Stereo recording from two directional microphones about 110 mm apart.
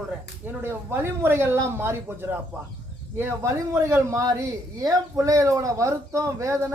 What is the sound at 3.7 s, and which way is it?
A woman's voice, 25° right (ahead or behind).